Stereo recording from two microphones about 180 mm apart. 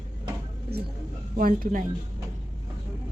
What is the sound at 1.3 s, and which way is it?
Speech, 50° right (ahead or behind).